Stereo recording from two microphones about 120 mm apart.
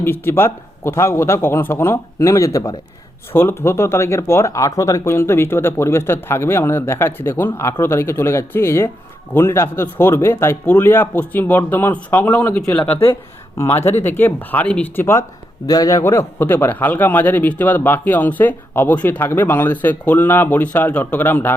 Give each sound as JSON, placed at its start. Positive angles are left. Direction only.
{"t": 0.0, "sound": "a man's voice", "side_deg": 20}
{"t": 15.6, "sound": "a man's voice", "side_deg": 30}